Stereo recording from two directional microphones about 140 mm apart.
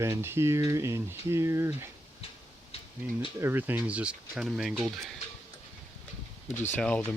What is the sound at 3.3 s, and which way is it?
Speech, 15° right (ahead or behind).